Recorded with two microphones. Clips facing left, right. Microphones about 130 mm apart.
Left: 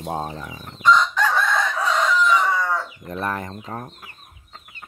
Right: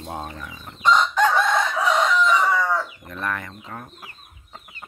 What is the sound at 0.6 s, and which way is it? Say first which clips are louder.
Chicken: left 1 dB; 20° right (ahead or behind).